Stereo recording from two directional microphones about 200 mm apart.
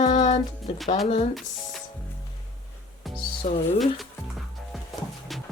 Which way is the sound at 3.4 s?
40° left (ahead or behind).